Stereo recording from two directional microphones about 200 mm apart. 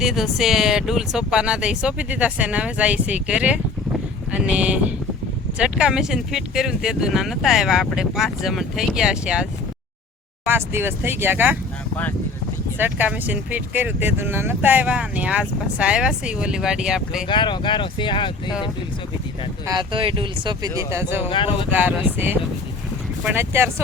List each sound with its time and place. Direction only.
0.0 s speech: centre (ahead or behind)
12.8 s speech: 10° right (ahead or behind)
17.2 s speech: 25° left (ahead or behind)
19.6 s speech: 25° right (ahead or behind)
21.2 s speech: 25° left (ahead or behind)
21.7 s speech: 10° right (ahead or behind)
23.4 s speech: 10° right (ahead or behind)